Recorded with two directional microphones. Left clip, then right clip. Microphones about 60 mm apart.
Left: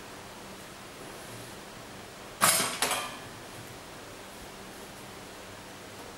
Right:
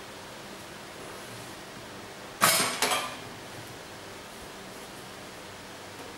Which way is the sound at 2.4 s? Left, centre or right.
Left.